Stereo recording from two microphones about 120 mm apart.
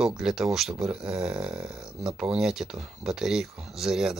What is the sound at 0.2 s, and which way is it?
Speech, 5° right (ahead or behind).